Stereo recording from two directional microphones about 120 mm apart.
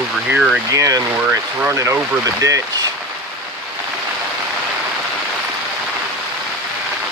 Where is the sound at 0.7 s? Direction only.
30° right (ahead or behind).